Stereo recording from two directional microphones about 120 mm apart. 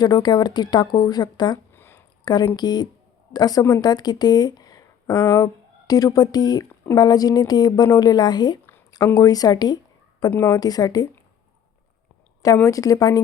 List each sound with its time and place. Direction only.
0.0 s speech: 35° left (ahead or behind)
1.7 s a sound: 20° left (ahead or behind)
2.2 s a woman's voice: 35° left (ahead or behind)
12.6 s a woman's voice: 30° left (ahead or behind)